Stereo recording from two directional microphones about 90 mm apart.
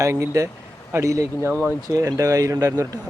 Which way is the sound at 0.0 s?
35° right (ahead or behind).